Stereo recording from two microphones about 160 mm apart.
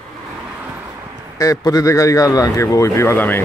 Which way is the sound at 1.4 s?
20° left (ahead or behind).